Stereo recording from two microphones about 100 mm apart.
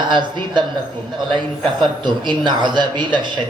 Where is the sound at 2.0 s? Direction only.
50° right (ahead or behind).